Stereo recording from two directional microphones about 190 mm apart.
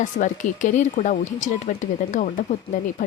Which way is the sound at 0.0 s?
40° left (ahead or behind).